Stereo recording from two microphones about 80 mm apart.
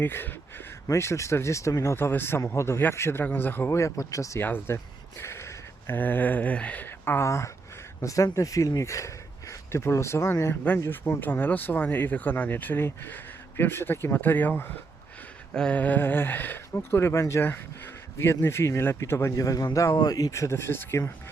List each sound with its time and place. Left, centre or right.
0.0 s speech: left
3.8 s speech: left
4.4 s a sound: left
6.0 s speech: left
19.4 s a man's voice: left
20.3 s speech: left